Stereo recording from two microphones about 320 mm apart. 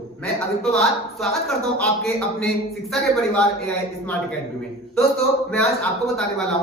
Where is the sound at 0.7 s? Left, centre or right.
Centre.